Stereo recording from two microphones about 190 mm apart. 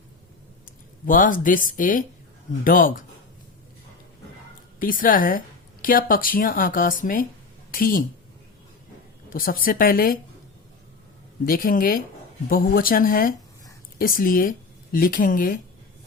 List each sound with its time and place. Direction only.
1.0 s a woman's voice: 45° left (ahead or behind)
4.8 s a woman's voice: 45° left (ahead or behind)
9.3 s a woman's voice: 50° left (ahead or behind)
11.4 s a woman's voice: 45° left (ahead or behind)